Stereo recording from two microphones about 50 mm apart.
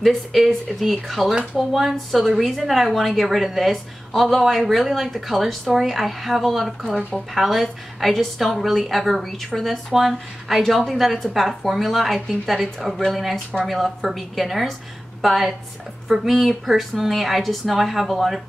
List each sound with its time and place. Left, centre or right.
0.0 s a woman's voice: centre
1.3 s speech: right
1.6 s a woman's voice: centre